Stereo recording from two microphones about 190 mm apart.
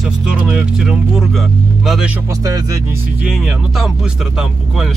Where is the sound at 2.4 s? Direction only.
15° right (ahead or behind).